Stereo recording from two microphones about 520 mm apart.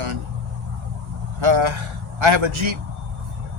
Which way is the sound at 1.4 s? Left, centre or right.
Right.